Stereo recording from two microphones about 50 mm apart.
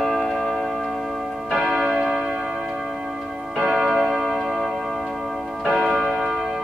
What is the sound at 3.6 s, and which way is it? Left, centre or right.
Tick-tock, centre.